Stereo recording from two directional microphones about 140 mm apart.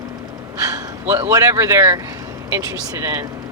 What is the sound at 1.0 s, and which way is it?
Speech, 20° right (ahead or behind).